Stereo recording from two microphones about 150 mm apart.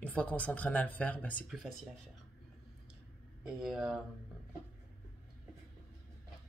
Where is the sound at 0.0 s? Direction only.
10° left (ahead or behind).